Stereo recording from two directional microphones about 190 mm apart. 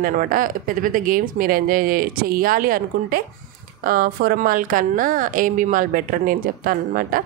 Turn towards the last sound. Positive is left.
turn(degrees=-50)  # may be behind; listen again after turning